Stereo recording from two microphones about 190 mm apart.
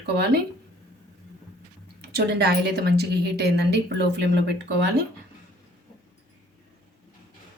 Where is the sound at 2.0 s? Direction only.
55° right (ahead or behind).